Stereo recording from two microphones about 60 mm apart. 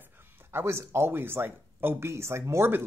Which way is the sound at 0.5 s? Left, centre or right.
Right.